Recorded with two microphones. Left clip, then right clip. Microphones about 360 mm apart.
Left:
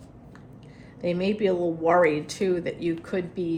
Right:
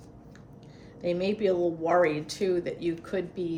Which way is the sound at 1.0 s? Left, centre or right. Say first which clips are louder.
Left 2 dB; left.